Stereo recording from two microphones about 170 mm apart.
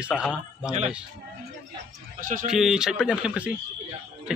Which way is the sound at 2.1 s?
50° right (ahead or behind).